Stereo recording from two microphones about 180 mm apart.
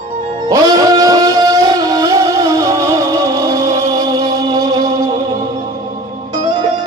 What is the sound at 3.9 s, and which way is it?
Chant, 20° right (ahead or behind).